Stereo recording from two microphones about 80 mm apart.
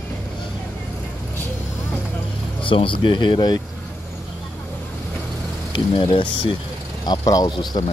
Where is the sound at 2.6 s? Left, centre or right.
Left.